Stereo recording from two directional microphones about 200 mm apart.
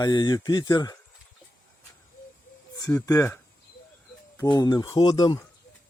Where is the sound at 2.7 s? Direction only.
15° left (ahead or behind).